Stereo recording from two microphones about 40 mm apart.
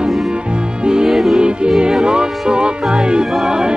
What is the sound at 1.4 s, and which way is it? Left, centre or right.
Music, right.